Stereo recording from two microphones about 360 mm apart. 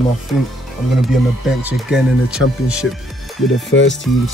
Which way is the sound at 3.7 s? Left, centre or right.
Left.